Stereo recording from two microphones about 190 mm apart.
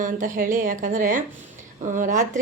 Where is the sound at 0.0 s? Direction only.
45° right (ahead or behind).